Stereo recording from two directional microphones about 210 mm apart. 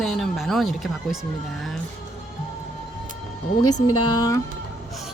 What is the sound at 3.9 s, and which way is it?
Speech, 20° left (ahead or behind).